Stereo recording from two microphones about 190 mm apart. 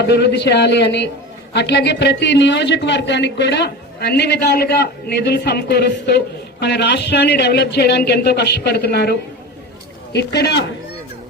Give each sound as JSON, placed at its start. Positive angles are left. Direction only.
{"t": 0.1, "sound": "a man's voice", "side_deg": 60}